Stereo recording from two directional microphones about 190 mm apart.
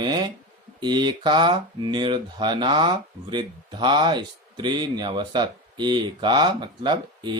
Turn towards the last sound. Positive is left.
turn(degrees=-25)  # may be behind; listen again after turning